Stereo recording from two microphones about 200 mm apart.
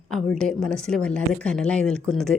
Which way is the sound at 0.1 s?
5° left (ahead or behind).